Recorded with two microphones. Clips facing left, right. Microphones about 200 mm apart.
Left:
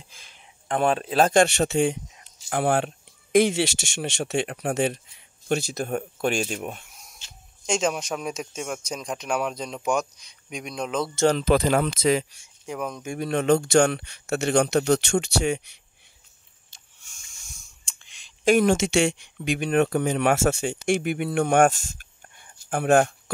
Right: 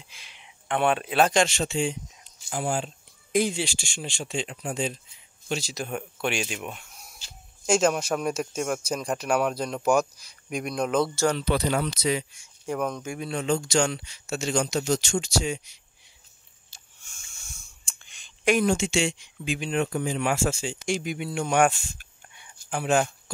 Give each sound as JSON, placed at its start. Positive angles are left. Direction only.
{"t": 0.3, "sound": "a sound", "side_deg": 40}
{"t": 1.3, "sound": "speech", "side_deg": 60}
{"t": 7.2, "sound": "a sound", "side_deg": -35}
{"t": 7.6, "sound": "speech", "side_deg": -5}
{"t": 11.3, "sound": "speech", "side_deg": 90}
{"t": 12.6, "sound": "speech", "side_deg": 0}
{"t": 13.2, "sound": "a man's voice", "side_deg": 50}
{"t": 17.1, "sound": "a sound", "side_deg": 0}
{"t": 18.9, "sound": "speech", "side_deg": 60}